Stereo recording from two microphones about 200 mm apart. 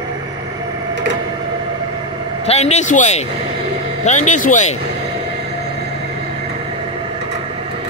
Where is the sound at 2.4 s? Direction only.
35° left (ahead or behind).